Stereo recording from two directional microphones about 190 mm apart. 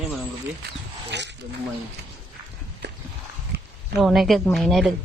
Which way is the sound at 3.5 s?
60° right (ahead or behind).